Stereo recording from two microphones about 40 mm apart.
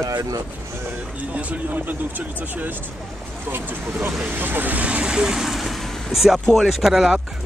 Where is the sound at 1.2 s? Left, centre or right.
Right.